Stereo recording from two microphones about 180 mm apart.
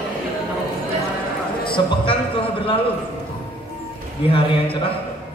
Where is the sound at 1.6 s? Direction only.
25° left (ahead or behind).